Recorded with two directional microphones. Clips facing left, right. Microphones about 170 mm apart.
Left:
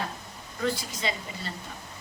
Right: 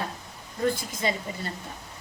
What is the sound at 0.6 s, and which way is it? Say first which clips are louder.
Speech: right 3 dB; 50° right (ahead or behind).